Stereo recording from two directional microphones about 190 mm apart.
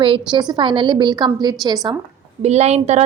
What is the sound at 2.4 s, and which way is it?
Speech, 35° right (ahead or behind).